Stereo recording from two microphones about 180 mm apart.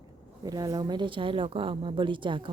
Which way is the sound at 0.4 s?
20° right (ahead or behind).